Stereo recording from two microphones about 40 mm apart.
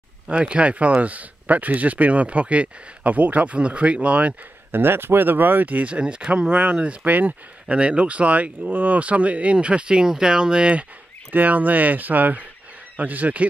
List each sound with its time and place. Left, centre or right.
0.3 s speech: right
4.7 s speech: right
5.7 s speech: right
5.9 s speech: right
7.1 s speech: right
7.6 s speech: right
11.3 s speech: right